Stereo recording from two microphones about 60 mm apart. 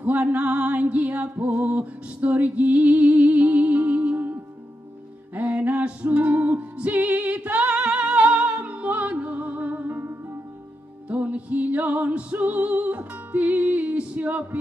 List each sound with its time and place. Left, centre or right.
0.0 s music: right
11.1 s music: right